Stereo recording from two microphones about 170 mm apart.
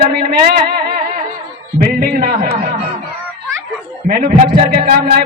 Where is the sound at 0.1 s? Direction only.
65° right (ahead or behind).